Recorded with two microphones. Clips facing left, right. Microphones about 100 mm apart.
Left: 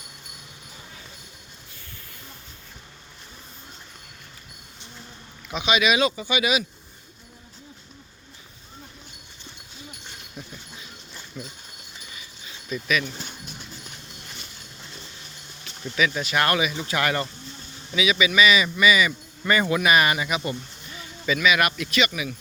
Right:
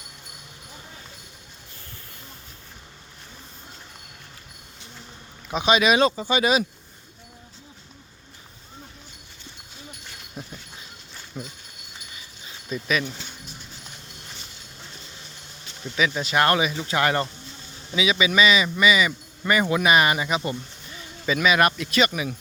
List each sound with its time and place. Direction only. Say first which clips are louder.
5.5 s speech: right 3 dB; 35° right (ahead or behind)
10.4 s dog: right 3 dB; 35° right (ahead or behind)
11.3 s speech: right 2 dB; 30° right (ahead or behind)
12.6 s speech: even; 30° right (ahead or behind)
16.0 s speech: right 1 dB; 20° right (ahead or behind); by 22.4 s 40° right (ahead or behind)